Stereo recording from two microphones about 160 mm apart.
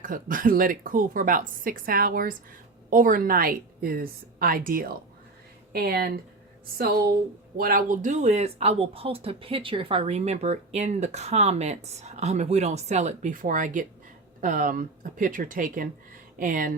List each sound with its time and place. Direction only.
0.0 s speech: 55° right (ahead or behind)
5.7 s speech: 80° right
7.5 s speech: 65° right (ahead or behind)